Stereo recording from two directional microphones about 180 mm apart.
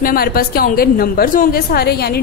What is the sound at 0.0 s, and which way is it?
A woman's voice, 55° left (ahead or behind).